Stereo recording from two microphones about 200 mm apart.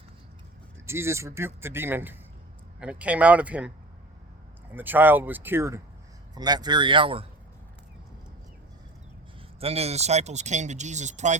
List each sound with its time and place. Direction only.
0.9 s speech: 15° right (ahead or behind)
4.7 s speech: 10° right (ahead or behind); by 7.3 s 25° right (ahead or behind)
9.6 s speech: 30° right (ahead or behind)